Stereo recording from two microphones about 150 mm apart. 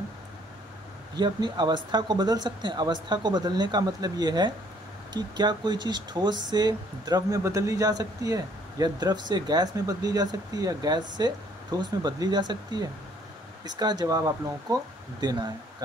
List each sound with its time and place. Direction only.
1.1 s speech: 30° right (ahead or behind)